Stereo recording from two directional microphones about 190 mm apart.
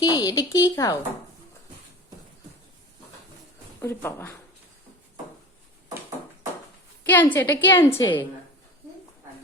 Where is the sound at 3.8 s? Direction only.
15° left (ahead or behind).